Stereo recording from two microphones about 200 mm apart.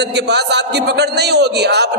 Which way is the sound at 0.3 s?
55° right (ahead or behind).